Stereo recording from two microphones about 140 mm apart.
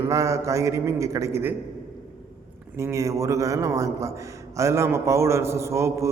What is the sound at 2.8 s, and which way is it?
A man's voice, 20° right (ahead or behind).